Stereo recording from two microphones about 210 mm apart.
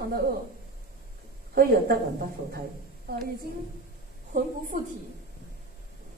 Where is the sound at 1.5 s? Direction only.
45° right (ahead or behind).